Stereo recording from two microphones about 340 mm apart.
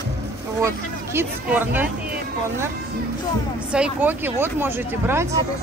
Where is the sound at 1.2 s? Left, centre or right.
Centre.